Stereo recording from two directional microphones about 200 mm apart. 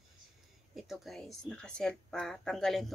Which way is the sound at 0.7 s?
Centre (ahead or behind).